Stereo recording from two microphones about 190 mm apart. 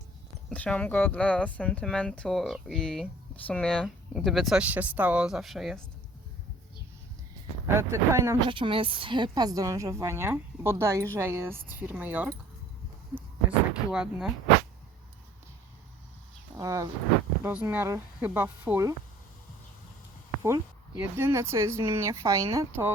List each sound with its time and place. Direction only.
0.5 s speech: 5° left (ahead or behind)
7.7 s a woman's voice: 15° right (ahead or behind)
8.4 s a woman's voice: 25° right (ahead or behind); by 12.3 s 10° right (ahead or behind)
13.9 s speech: 5° right (ahead or behind)
16.6 s a woman's voice: 15° right (ahead or behind)
20.4 s a woman's voice: 10° right (ahead or behind)